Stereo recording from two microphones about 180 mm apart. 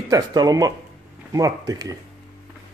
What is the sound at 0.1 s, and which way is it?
Speech, 20° right (ahead or behind).